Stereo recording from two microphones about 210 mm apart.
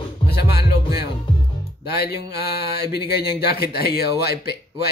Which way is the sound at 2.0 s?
50° left (ahead or behind).